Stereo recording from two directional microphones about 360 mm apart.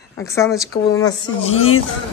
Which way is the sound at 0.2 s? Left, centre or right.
Centre.